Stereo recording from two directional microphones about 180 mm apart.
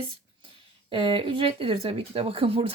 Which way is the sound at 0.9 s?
30° right (ahead or behind).